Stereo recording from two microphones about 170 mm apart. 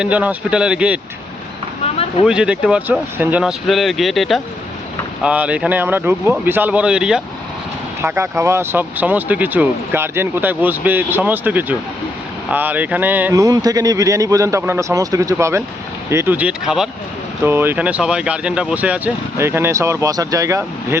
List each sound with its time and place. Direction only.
0.0 s speech: 10° right (ahead or behind)
2.2 s speech: 5° right (ahead or behind)
17.4 s speech: 15° right (ahead or behind)